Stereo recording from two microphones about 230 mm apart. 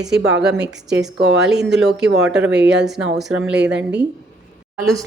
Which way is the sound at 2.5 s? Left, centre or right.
Right.